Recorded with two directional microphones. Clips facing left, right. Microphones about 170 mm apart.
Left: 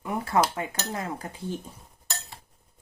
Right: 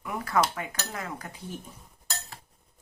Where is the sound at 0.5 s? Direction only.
30° left (ahead or behind).